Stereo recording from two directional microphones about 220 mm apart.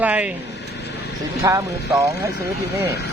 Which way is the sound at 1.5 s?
15° right (ahead or behind).